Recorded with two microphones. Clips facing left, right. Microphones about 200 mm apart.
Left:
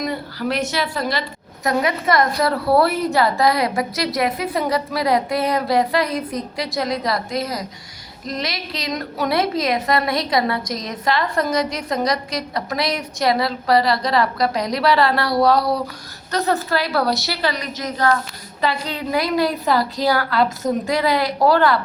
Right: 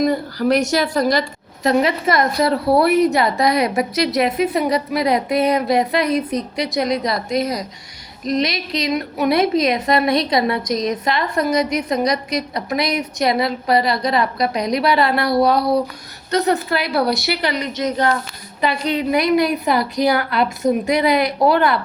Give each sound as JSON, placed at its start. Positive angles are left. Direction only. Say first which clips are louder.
{"t": 0.0, "sound": "speech", "louder": "right 6 dB", "side_deg": -45}
{"t": 1.6, "sound": "a woman's voice", "louder": "right 3 dB", "side_deg": -25}